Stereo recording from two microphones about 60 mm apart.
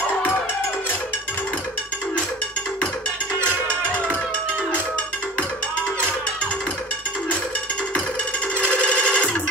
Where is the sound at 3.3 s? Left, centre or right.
Centre.